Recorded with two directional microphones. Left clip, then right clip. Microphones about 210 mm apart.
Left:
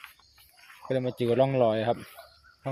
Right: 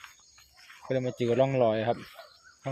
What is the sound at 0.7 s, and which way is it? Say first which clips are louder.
Speech: left 1 dB; 15° left (ahead or behind).